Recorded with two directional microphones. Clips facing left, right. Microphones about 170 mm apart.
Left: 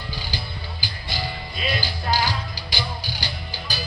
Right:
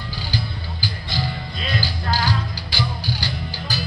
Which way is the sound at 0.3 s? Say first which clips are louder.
Right 5 dB; 15° left (ahead or behind).